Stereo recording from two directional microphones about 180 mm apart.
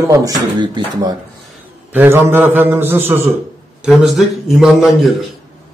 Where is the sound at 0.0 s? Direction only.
20° right (ahead or behind).